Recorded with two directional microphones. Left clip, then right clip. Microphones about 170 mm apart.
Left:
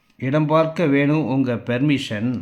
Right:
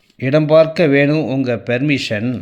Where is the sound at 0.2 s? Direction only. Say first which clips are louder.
Right 7 dB; 15° right (ahead or behind).